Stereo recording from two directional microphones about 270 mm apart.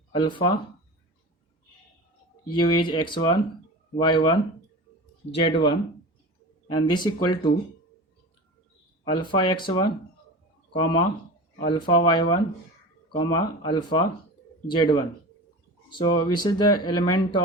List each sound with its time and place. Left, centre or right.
0.1 s speech: centre
2.5 s speech: centre
9.2 s speech: centre